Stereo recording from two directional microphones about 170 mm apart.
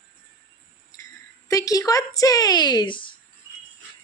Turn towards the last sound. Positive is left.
turn(degrees=30)  # may be behind; listen again after turning